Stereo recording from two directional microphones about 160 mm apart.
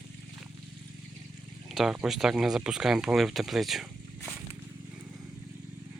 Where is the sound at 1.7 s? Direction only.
5° right (ahead or behind).